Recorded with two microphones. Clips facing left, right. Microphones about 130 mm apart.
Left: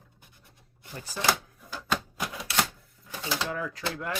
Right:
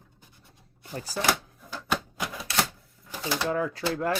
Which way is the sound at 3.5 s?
30° right (ahead or behind).